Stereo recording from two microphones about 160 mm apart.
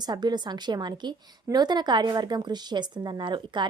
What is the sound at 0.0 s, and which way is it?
A woman's voice, 25° right (ahead or behind).